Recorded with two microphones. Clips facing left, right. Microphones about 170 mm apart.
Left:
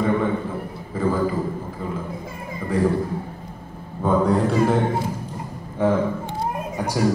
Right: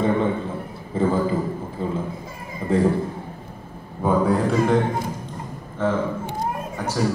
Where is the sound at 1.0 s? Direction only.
25° right (ahead or behind).